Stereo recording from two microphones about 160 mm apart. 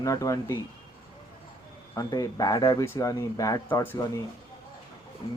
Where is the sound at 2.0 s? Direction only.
25° left (ahead or behind).